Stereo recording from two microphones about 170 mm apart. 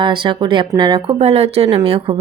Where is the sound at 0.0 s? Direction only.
30° right (ahead or behind).